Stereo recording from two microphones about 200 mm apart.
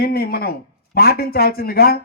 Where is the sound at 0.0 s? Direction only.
50° left (ahead or behind).